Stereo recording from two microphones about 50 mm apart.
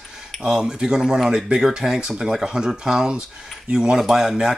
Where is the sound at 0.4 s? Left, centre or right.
Centre.